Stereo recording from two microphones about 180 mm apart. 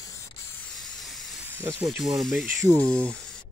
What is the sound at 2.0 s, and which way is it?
Speech, centre (ahead or behind).